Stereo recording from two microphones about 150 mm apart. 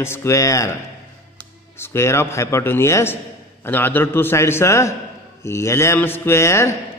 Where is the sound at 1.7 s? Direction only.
15° left (ahead or behind).